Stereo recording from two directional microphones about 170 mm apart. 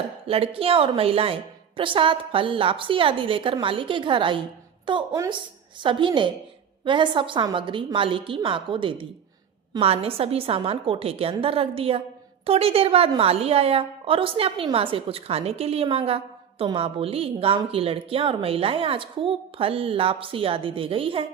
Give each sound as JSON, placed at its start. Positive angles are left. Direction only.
{"t": 0.3, "sound": "a woman's voice", "side_deg": -35}